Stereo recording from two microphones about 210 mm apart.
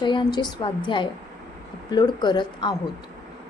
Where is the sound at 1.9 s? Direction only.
20° left (ahead or behind).